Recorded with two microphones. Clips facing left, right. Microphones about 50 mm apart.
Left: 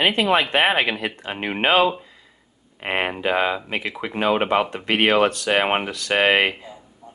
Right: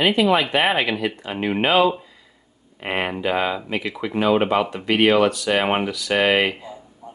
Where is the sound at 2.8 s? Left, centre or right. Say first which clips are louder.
Even; left.